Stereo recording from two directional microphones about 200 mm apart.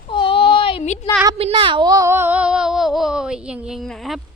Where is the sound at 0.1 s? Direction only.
25° left (ahead or behind).